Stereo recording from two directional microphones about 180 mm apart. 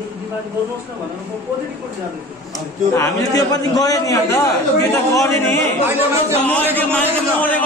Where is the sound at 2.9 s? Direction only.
20° left (ahead or behind).